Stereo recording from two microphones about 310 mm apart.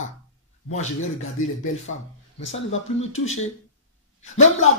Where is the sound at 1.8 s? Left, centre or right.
Left.